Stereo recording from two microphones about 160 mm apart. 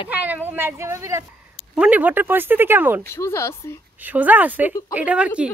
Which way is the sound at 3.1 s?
15° left (ahead or behind).